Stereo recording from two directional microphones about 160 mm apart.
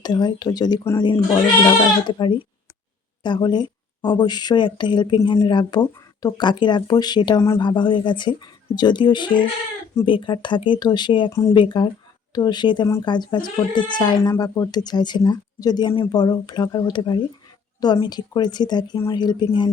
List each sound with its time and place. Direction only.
0.0 s speech: 25° left (ahead or behind)
11.3 s speech: 20° left (ahead or behind)
11.5 s speech: 30° left (ahead or behind)